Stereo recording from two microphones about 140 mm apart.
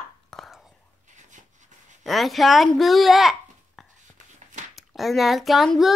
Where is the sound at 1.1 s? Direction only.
60° right (ahead or behind).